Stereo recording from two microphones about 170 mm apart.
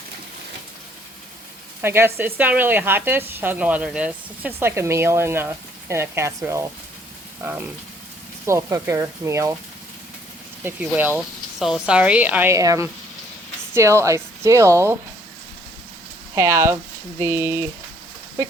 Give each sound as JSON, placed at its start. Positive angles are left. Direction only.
{"t": 1.8, "sound": "a woman's voice", "side_deg": -15}
{"t": 10.6, "sound": "a woman's voice", "side_deg": -10}
{"t": 16.3, "sound": "a woman's voice", "side_deg": -15}